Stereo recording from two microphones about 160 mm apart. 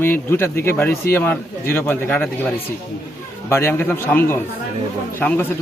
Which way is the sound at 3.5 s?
15° left (ahead or behind).